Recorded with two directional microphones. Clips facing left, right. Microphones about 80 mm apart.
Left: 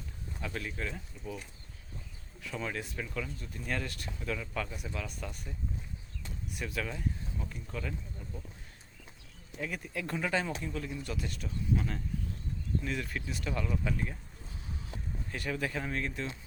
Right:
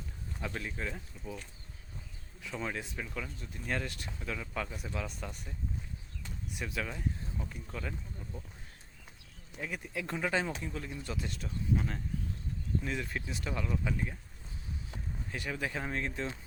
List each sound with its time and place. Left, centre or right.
0.4 s speech: centre
2.4 s speech: centre
4.2 s speech: centre
6.5 s speech: centre
9.6 s speech: centre
11.0 s speech: right
11.4 s speech: centre
15.3 s speech: centre